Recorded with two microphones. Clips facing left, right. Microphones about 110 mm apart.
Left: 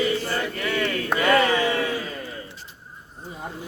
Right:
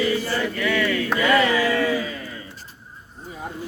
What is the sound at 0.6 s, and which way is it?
Mantra, 35° left (ahead or behind).